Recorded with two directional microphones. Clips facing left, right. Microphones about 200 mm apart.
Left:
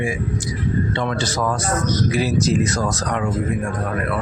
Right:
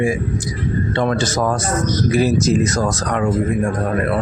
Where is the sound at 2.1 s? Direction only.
45° right (ahead or behind).